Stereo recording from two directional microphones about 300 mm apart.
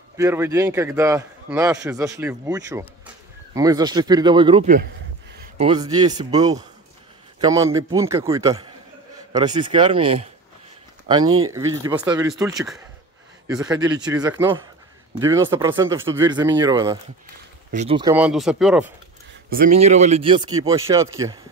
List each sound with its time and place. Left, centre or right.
0.2 s a man's voice: centre
5.4 s a sound: centre
5.9 s a man's voice: centre
11.2 s speech: right
11.5 s a man's voice: centre
19.5 s speech: right